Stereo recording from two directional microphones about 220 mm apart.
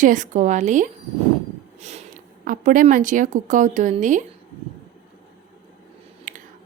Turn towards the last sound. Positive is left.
turn(degrees=-35)  # may be behind; listen again after turning